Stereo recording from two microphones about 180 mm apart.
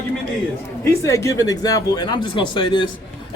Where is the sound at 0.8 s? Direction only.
15° left (ahead or behind).